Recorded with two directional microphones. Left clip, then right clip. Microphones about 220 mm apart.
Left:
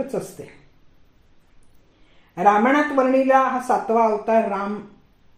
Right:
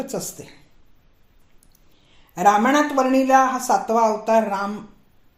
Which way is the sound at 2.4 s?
35° right (ahead or behind).